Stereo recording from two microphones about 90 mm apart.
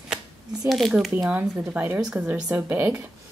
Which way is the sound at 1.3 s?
15° right (ahead or behind).